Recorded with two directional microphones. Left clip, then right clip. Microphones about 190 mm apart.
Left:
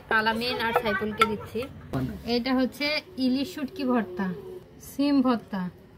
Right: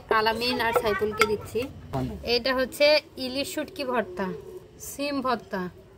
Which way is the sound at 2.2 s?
65° right (ahead or behind).